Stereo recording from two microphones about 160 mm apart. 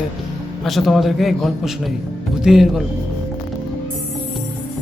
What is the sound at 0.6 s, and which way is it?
A man's voice, centre (ahead or behind).